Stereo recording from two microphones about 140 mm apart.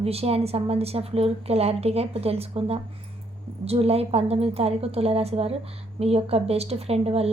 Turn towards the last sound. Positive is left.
turn(degrees=-45)  # may be behind; listen again after turning